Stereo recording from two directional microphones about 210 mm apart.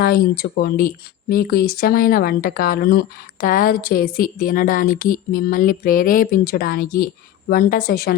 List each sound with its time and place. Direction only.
0.0 s speech: 45° left (ahead or behind)